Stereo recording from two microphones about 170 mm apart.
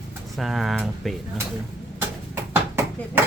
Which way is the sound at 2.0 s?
15° right (ahead or behind).